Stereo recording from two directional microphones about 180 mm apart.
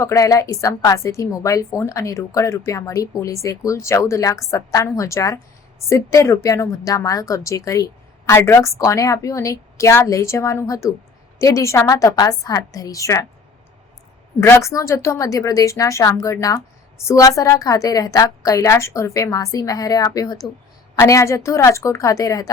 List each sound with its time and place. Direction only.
0.0 s a woman's voice: 20° left (ahead or behind)
14.4 s a woman's voice: 15° left (ahead or behind)